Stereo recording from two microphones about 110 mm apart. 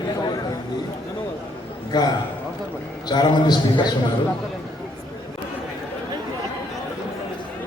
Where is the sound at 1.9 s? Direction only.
40° left (ahead or behind).